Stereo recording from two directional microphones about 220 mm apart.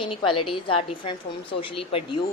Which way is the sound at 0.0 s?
25° left (ahead or behind).